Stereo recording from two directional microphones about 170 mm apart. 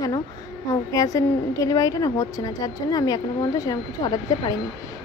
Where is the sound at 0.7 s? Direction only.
20° left (ahead or behind).